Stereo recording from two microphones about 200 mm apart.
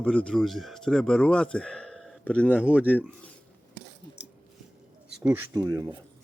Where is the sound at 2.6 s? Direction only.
5° right (ahead or behind).